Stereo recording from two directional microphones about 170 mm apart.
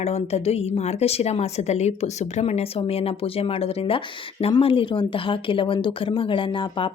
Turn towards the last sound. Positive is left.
turn(degrees=30)  # may be behind; listen again after turning